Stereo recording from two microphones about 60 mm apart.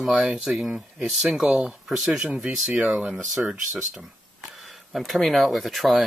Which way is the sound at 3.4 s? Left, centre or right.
Centre.